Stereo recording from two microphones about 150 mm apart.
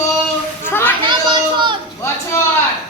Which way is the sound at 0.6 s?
15° left (ahead or behind).